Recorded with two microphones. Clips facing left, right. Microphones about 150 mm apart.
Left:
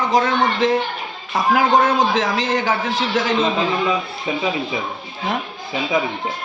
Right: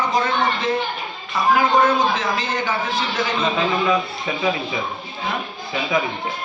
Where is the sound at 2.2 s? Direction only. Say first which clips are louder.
Left 4 dB; 90° left.